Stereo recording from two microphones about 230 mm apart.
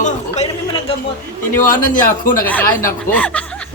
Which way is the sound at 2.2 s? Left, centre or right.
Left.